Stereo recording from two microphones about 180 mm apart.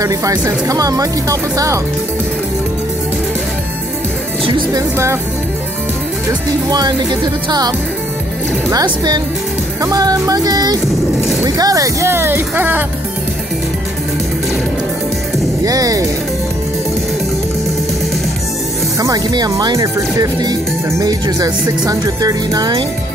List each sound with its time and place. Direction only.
0.0 s speech: 20° right (ahead or behind)
4.5 s speech: 25° right (ahead or behind)
4.9 s speech: 15° right (ahead or behind)
6.7 s speech: 25° right (ahead or behind)
15.6 s speech: 20° right (ahead or behind)
18.9 s speech: 20° right (ahead or behind)